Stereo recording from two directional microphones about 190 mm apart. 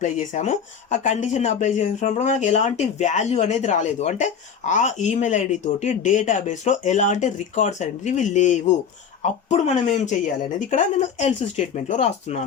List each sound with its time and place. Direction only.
0.0 s speech: 40° left (ahead or behind)